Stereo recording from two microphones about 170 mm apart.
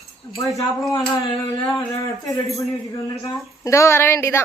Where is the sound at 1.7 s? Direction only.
20° left (ahead or behind).